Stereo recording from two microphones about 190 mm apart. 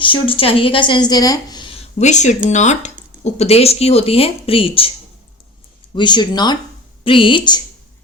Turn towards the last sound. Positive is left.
turn(degrees=25)  # may be behind; listen again after turning